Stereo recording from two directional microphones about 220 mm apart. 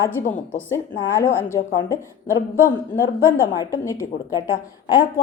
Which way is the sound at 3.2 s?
15° left (ahead or behind).